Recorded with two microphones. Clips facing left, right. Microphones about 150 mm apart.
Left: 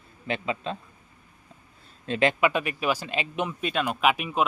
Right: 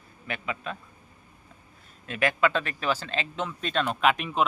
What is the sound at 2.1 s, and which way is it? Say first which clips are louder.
Speech: left 2 dB; 25° left (ahead or behind).